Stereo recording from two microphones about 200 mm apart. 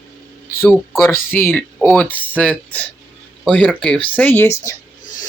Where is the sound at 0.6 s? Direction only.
10° left (ahead or behind).